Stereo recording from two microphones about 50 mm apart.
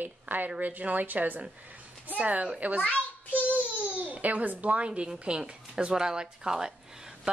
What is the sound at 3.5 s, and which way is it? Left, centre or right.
Baby cry, right.